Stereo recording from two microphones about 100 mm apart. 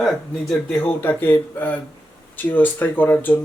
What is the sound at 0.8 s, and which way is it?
A man's voice, 15° left (ahead or behind).